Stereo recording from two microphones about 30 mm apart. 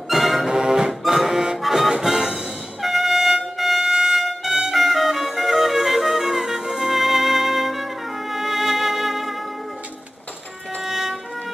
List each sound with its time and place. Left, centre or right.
0.1 s music: centre
0.5 s music: right
0.8 s music: centre
1.6 s music: centre
1.9 s music: centre
2.8 s music: centre
10.8 s music: centre